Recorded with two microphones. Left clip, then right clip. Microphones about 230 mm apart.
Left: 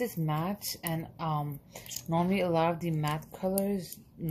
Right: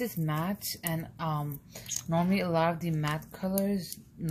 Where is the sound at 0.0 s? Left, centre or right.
Centre.